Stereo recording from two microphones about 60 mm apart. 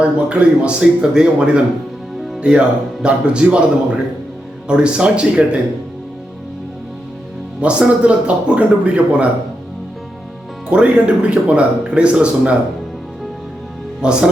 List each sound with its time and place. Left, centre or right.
0.0 s speech: centre
4.7 s speech: centre
7.6 s speech: right
10.7 s speech: centre
14.0 s speech: centre